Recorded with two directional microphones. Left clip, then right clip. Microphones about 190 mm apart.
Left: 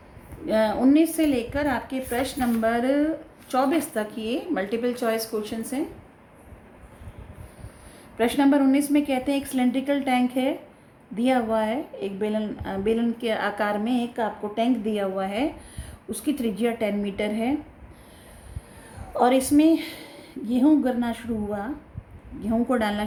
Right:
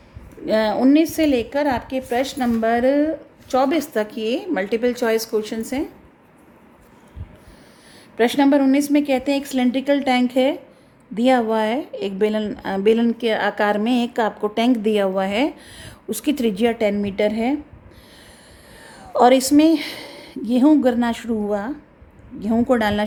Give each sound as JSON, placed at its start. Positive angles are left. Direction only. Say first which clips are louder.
{"t": 0.4, "sound": "a woman's voice", "louder": "right 4 dB", "side_deg": -40}
{"t": 8.2, "sound": "speech", "louder": "right 4 dB", "side_deg": -40}
{"t": 19.1, "sound": "speech", "louder": "right 6 dB", "side_deg": -45}